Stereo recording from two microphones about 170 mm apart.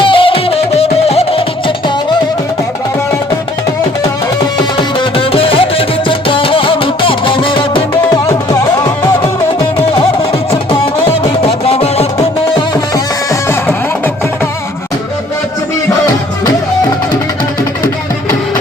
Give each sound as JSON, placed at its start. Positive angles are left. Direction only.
{"t": 0.0, "sound": "music", "side_deg": 30}
{"t": 4.8, "sound": "music", "side_deg": 30}
{"t": 11.2, "sound": "music", "side_deg": 35}
{"t": 13.5, "sound": "music", "side_deg": 15}